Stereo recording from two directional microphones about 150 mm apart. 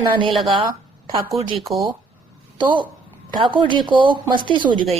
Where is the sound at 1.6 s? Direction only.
Centre (ahead or behind).